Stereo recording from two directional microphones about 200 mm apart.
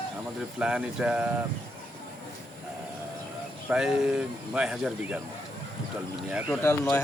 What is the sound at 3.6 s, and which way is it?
Speech, 5° right (ahead or behind).